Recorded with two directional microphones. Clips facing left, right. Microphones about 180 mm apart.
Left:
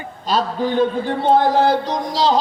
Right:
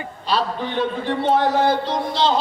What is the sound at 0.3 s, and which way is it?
Speech, 45° left (ahead or behind).